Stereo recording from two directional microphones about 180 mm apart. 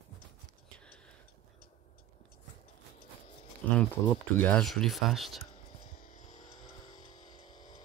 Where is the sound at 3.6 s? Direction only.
10° left (ahead or behind).